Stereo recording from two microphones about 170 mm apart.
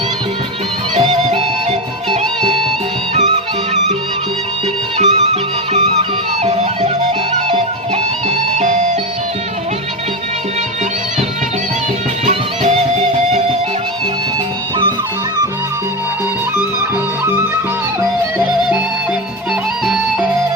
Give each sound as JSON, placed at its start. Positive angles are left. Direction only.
{"t": 2.0, "sound": "music", "side_deg": -30}
{"t": 4.9, "sound": "music", "side_deg": -40}
{"t": 12.2, "sound": "music", "side_deg": -40}